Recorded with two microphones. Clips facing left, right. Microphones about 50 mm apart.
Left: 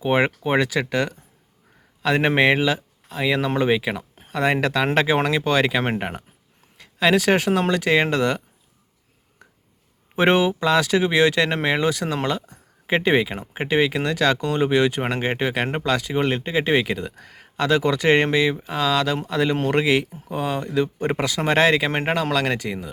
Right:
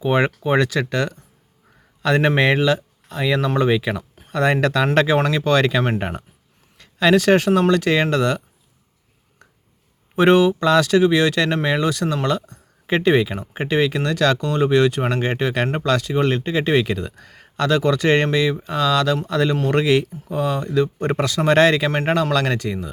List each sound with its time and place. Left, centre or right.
0.0 s speech: centre
10.2 s speech: centre